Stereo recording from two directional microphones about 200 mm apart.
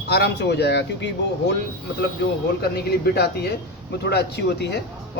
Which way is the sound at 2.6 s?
50° left (ahead or behind).